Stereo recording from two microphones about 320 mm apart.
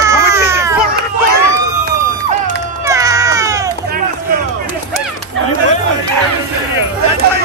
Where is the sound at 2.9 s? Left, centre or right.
Centre.